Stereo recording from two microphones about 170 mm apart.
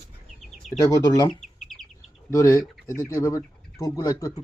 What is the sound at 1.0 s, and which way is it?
Speech, 25° left (ahead or behind).